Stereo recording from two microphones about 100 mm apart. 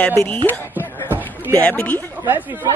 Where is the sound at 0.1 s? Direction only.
25° left (ahead or behind).